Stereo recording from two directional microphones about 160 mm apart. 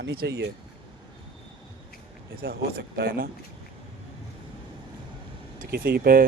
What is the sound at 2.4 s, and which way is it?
Speech, 75° right (ahead or behind).